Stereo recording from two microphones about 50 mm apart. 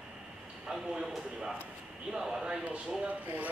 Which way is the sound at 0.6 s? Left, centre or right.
Centre.